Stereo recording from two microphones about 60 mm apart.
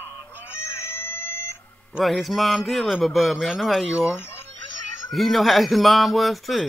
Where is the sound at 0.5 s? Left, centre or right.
Left.